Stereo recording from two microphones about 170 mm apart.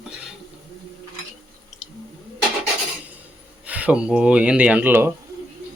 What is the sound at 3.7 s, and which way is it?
Speech, 10° right (ahead or behind).